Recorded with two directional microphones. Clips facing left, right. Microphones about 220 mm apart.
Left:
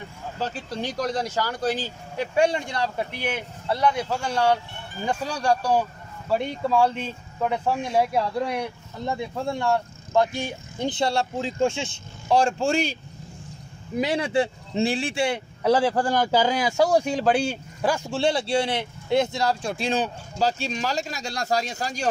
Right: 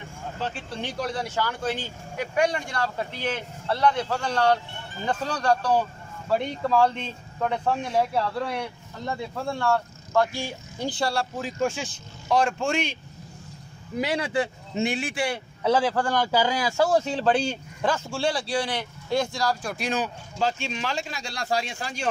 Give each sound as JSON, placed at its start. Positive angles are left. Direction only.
{"t": 0.4, "sound": "speech", "side_deg": 40}
{"t": 13.9, "sound": "speech", "side_deg": 20}